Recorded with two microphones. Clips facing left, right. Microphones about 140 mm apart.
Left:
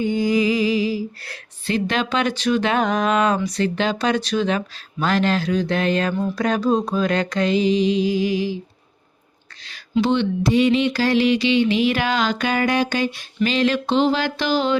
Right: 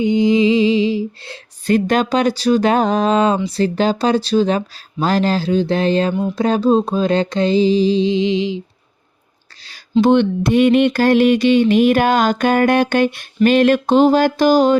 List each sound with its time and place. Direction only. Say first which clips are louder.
0.0 s lullaby: right 5 dB; 20° right (ahead or behind)
1.6 s speech: right 7 dB; 45° right (ahead or behind); by 6.1 s 30° right (ahead or behind)
6.1 s speech: right 3 dB; 15° right (ahead or behind)
6.4 s music: right 5 dB; 30° right (ahead or behind)
9.6 s a sound: right 5 dB; 35° right (ahead or behind)
10.1 s mantra: right 6 dB; 55° right (ahead or behind)